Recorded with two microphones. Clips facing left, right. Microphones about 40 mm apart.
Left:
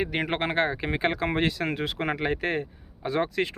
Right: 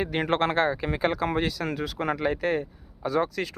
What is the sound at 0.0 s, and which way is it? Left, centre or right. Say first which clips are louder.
Speech: right 2 dB; centre.